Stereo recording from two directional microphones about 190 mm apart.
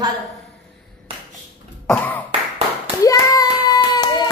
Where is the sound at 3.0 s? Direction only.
20° left (ahead or behind).